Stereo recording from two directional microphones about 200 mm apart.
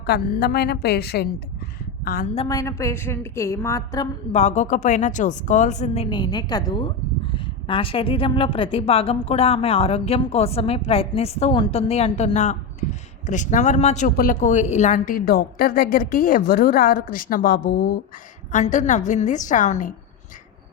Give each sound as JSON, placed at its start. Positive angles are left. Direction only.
{"t": 0.0, "sound": "a woman's voice", "side_deg": 55}
{"t": 2.5, "sound": "a woman's voice", "side_deg": 15}
{"t": 4.3, "sound": "a woman's voice", "side_deg": 35}